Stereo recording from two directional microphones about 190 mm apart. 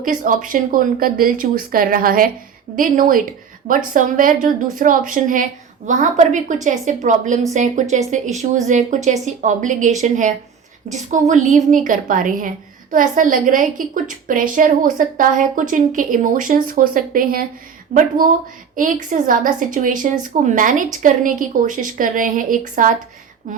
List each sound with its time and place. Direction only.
0.0 s a woman's voice: 45° right (ahead or behind)